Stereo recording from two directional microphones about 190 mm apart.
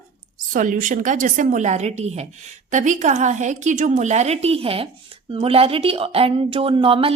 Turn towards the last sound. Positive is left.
turn(degrees=-30)  # may be behind; listen again after turning